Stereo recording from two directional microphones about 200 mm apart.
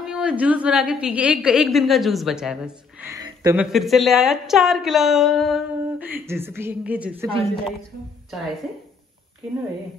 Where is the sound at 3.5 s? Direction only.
Centre (ahead or behind).